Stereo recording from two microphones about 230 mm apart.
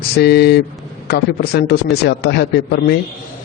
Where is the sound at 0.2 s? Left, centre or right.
Left.